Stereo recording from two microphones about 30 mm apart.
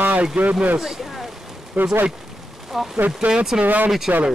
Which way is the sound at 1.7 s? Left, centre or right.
Right.